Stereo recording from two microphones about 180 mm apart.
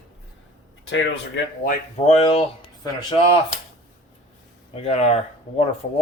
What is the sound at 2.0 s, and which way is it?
Speech, 35° left (ahead or behind).